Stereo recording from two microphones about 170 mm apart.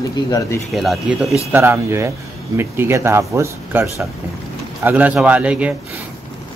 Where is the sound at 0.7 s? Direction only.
Centre (ahead or behind).